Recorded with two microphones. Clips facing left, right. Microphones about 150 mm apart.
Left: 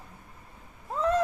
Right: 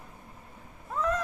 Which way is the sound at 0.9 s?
30° left (ahead or behind).